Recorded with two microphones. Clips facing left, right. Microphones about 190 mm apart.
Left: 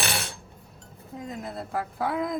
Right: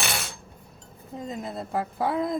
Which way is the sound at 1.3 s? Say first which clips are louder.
Right 2 dB; 20° right (ahead or behind).